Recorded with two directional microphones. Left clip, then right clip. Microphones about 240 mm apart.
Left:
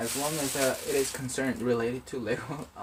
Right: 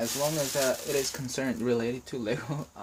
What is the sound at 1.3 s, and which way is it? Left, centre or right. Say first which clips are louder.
Cutlery: even; right.